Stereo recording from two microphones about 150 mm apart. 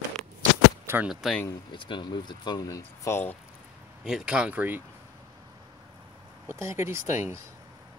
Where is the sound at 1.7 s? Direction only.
30° left (ahead or behind); by 3.4 s 15° left (ahead or behind).